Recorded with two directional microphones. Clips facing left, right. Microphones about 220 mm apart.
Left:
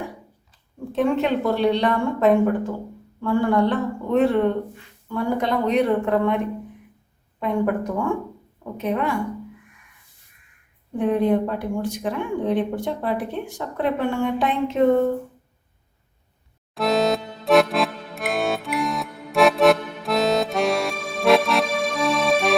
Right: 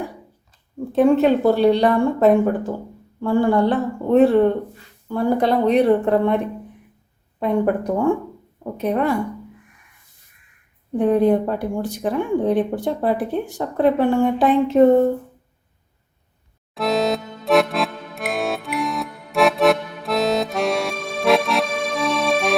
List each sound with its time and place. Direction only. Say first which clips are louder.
0.9 s speech: right 6 dB; 35° right (ahead or behind)
10.9 s speech: right 4 dB; 40° right (ahead or behind)
16.7 s music: even; centre (ahead or behind)